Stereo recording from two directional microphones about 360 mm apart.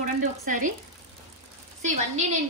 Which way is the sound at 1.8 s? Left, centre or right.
Centre.